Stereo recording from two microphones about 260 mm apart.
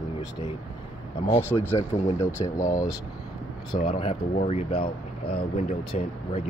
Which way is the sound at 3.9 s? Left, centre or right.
Left.